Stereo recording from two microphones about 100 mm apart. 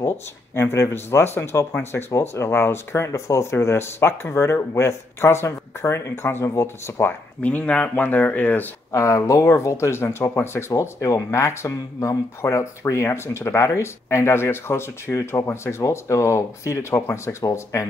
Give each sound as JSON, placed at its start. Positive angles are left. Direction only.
{"t": 0.6, "sound": "speech", "side_deg": 25}
{"t": 7.4, "sound": "speech", "side_deg": 15}
{"t": 8.9, "sound": "speech", "side_deg": 30}